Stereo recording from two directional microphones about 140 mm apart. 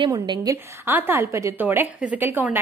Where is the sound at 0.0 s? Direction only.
30° right (ahead or behind).